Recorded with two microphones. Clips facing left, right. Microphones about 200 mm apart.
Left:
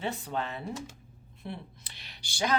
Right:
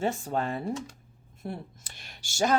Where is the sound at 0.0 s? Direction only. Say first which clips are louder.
Right 5 dB; 45° right (ahead or behind).